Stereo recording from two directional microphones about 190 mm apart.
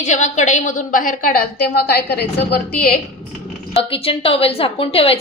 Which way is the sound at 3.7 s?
30° left (ahead or behind).